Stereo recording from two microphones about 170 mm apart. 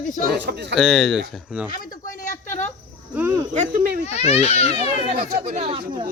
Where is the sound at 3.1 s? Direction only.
15° right (ahead or behind).